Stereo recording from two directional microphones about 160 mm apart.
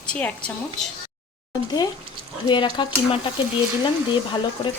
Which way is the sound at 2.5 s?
30° left (ahead or behind).